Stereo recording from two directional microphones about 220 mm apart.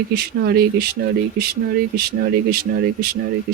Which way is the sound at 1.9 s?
45° right (ahead or behind).